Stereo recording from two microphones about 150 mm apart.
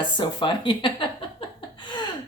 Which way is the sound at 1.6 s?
30° left (ahead or behind).